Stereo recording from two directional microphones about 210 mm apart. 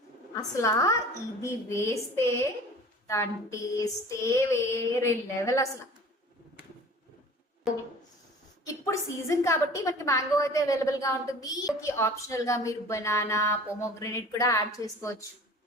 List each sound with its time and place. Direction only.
0.3 s a woman's voice: 15° left (ahead or behind)
7.7 s a sound: centre (ahead or behind)
8.8 s a woman's voice: 15° left (ahead or behind)